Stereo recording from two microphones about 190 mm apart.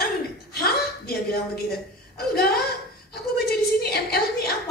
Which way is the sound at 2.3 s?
55° left (ahead or behind).